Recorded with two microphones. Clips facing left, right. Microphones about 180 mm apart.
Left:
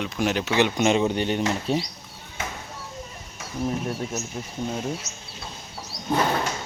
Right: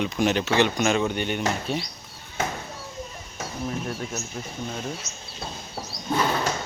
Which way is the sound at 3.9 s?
25° left (ahead or behind).